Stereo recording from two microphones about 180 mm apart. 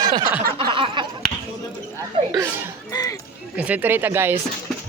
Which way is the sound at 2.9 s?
20° left (ahead or behind).